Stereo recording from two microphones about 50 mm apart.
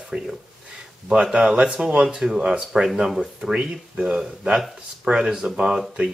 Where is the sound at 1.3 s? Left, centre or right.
Centre.